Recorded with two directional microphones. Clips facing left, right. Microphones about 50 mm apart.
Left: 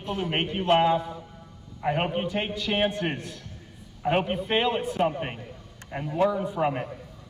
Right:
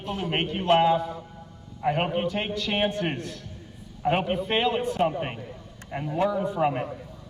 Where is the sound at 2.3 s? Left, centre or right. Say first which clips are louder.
Even; centre.